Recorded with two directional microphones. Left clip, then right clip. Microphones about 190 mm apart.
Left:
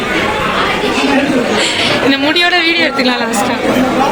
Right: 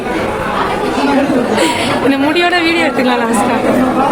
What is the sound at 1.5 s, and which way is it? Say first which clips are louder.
Speech: even; 40° right (ahead or behind).